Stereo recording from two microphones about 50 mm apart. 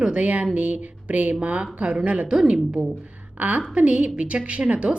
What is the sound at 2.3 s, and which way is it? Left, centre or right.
Speech, centre.